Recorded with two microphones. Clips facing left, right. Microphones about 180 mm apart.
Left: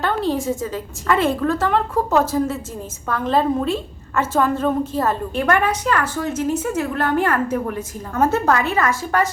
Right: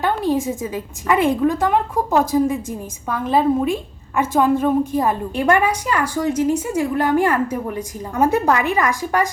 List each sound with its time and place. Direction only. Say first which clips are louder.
0.0 s a woman's voice: right 2 dB; 15° right (ahead or behind)